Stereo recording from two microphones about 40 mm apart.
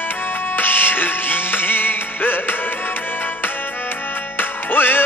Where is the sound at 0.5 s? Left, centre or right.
Left.